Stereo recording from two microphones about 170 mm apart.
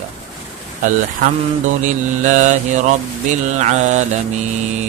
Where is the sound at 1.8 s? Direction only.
45° right (ahead or behind).